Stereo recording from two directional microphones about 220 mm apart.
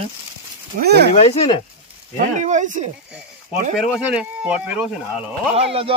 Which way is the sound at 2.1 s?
35° right (ahead or behind).